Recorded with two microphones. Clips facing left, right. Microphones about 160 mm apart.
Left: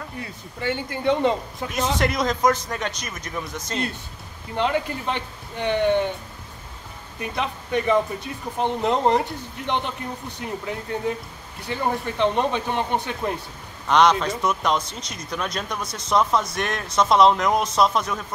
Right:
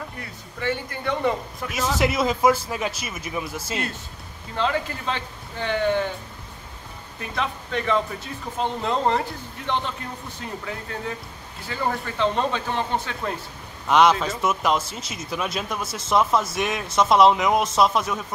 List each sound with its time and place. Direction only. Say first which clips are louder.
1.0 s speech: left 4 dB; 25° left (ahead or behind)
2.0 s a man's voice: right 4 dB; 5° right (ahead or behind)
4.6 s speech: left 2 dB; 20° left (ahead or behind)
7.3 s speech: left 2 dB; 15° left (ahead or behind)
13.8 s speech: even; 5° right (ahead or behind)